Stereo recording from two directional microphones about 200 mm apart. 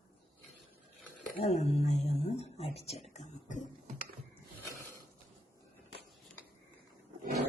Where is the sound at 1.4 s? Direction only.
35° left (ahead or behind).